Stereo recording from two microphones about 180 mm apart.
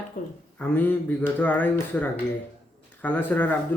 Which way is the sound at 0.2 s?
45° left (ahead or behind).